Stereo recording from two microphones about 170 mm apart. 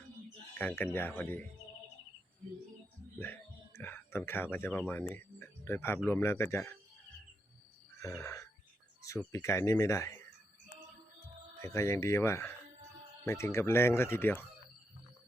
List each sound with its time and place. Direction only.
0.6 s speech: 10° left (ahead or behind)
3.2 s speech: 10° left (ahead or behind)
8.0 s frog: 15° left (ahead or behind)
9.0 s speech: 20° left (ahead or behind)
11.6 s speech: 15° left (ahead or behind)